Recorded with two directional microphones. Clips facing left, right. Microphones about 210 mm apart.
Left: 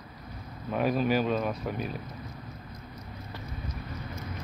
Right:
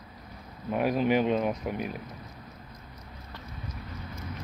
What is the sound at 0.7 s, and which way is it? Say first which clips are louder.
Speech: right 1 dB; 10° right (ahead or behind).